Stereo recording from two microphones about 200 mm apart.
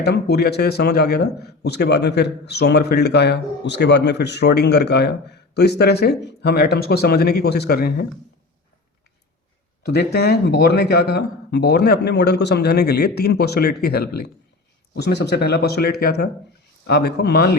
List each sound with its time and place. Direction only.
0.0 s a man's voice: 55° left (ahead or behind)
9.8 s speech: 55° left (ahead or behind)